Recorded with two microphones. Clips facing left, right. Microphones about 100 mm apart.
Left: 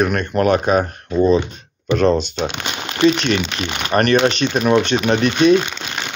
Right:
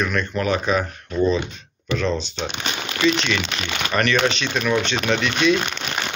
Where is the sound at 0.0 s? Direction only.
55° left (ahead or behind).